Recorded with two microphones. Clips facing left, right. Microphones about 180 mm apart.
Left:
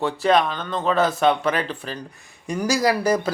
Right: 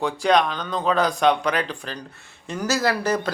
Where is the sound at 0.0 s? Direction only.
5° left (ahead or behind).